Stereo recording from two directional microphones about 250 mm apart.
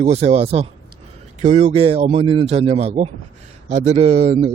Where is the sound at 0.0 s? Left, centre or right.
Right.